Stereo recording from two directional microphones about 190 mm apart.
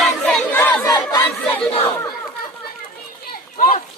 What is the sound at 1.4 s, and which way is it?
Crowd, 5° left (ahead or behind).